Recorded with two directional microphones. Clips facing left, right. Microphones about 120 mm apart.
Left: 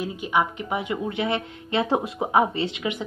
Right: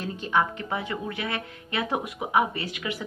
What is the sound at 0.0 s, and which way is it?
A woman's voice, 10° left (ahead or behind).